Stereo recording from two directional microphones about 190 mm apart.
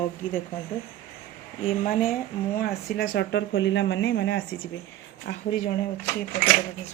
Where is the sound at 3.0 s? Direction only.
65° left (ahead or behind).